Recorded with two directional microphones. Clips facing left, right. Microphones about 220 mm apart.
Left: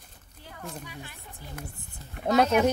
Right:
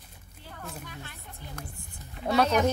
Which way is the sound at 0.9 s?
10° left (ahead or behind).